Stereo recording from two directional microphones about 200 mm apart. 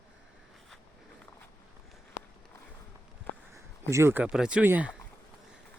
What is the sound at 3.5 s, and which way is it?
Speech, 15° right (ahead or behind).